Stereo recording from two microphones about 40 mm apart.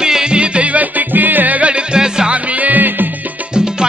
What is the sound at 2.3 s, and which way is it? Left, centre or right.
Music, right.